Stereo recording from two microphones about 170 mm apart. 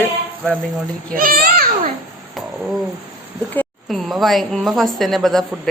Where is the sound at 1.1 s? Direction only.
55° right (ahead or behind).